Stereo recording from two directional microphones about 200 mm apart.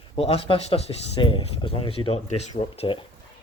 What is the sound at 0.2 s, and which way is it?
Speech, 30° left (ahead or behind).